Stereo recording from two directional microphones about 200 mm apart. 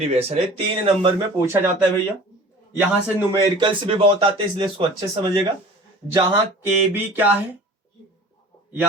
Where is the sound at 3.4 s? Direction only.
25° right (ahead or behind).